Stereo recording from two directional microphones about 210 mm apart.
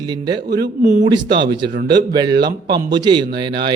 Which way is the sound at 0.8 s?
35° right (ahead or behind).